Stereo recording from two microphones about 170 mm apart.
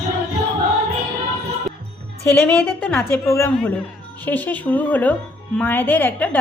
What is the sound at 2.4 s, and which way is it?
A woman's voice, 10° left (ahead or behind).